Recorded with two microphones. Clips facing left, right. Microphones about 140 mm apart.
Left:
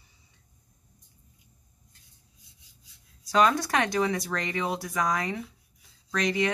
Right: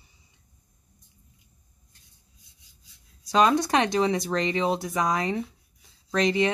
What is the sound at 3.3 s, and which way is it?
Speech, 20° right (ahead or behind).